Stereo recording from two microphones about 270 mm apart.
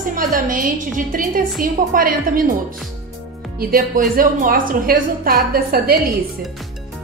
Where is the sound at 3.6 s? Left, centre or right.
Right.